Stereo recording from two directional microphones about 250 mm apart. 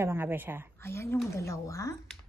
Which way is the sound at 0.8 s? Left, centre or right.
Centre.